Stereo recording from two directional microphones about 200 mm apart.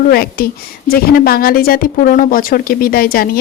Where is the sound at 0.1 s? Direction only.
50° left (ahead or behind).